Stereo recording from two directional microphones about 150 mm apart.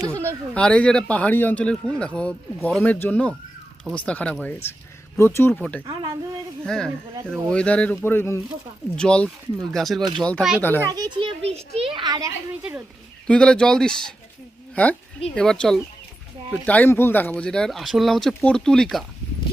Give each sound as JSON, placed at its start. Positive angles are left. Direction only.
{"t": 0.0, "sound": "speech", "side_deg": -15}
{"t": 0.5, "sound": "speech", "side_deg": 10}
{"t": 5.5, "sound": "speech", "side_deg": 5}
{"t": 5.8, "sound": "speech", "side_deg": -30}
{"t": 6.7, "sound": "speech", "side_deg": 5}
{"t": 10.8, "sound": "a child's voice", "side_deg": -25}
{"t": 13.2, "sound": "speech", "side_deg": 5}